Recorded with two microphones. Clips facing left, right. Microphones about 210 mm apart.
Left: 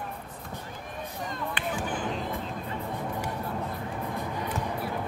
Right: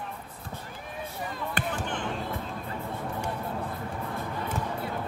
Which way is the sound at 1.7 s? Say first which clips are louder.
Left 1 dB; 5° left (ahead or behind).